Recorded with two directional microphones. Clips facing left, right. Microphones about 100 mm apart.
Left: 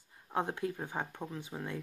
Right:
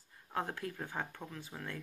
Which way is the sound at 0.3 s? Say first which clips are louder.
Left 4 dB; 20° left (ahead or behind).